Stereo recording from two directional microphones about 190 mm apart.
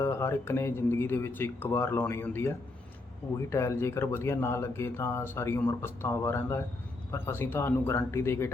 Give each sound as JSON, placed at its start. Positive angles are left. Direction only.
{"t": 0.0, "sound": "speech", "side_deg": 15}